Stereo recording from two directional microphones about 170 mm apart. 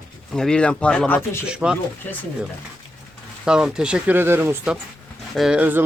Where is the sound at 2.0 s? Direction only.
10° left (ahead or behind).